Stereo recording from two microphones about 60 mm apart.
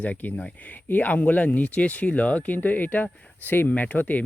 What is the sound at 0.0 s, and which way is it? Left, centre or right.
Speech, left.